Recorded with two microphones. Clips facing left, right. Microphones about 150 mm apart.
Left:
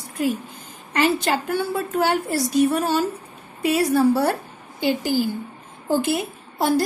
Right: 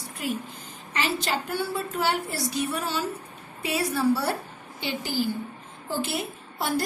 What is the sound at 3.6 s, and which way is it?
Speech, 45° left (ahead or behind).